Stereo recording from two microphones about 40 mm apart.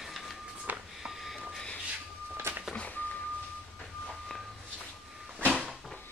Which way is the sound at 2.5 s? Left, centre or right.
Right.